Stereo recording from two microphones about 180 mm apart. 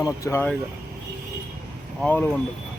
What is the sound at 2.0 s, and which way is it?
Speech, 10° left (ahead or behind).